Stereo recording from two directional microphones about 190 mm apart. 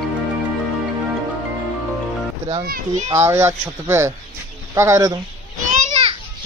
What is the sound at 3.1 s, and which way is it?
Speech, 15° right (ahead or behind).